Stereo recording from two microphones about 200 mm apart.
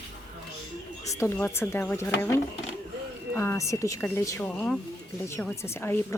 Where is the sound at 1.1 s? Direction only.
15° left (ahead or behind).